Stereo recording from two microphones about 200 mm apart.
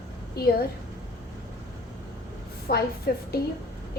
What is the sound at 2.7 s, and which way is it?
Speech, 50° left (ahead or behind).